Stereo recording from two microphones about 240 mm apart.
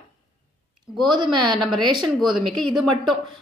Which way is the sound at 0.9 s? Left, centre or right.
Centre.